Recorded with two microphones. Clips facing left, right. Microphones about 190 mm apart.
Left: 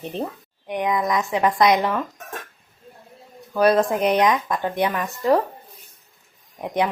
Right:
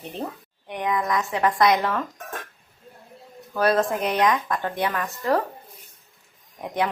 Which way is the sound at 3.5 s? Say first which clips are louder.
Left 4 dB; 15° left (ahead or behind).